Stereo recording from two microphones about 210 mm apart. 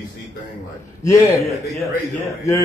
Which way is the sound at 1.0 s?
15° left (ahead or behind).